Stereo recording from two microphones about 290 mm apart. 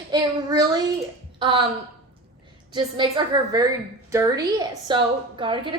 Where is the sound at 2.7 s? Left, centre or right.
Centre.